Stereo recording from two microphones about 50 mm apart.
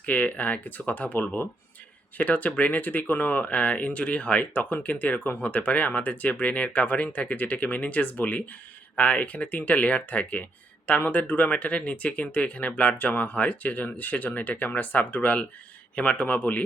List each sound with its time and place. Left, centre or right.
0.0 s speech: left
16.2 s speech: left